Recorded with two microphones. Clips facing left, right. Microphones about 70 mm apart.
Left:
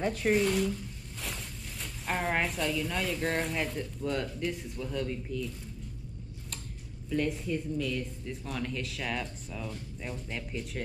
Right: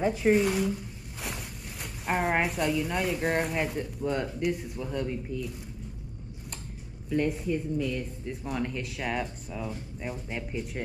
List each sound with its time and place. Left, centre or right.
0.0 s zipper: centre
2.7 s speech: centre
4.7 s speech: centre
7.4 s speech: centre